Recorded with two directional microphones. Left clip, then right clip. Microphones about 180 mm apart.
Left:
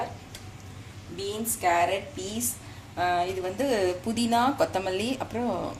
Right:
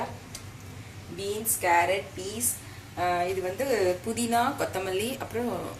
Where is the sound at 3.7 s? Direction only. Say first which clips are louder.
Right 1 dB; 45° left (ahead or behind).